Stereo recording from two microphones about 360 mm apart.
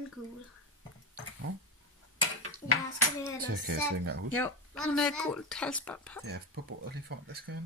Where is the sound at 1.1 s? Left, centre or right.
Right.